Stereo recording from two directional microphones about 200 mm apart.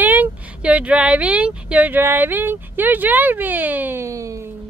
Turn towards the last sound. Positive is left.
turn(degrees=-15)  # may be behind; listen again after turning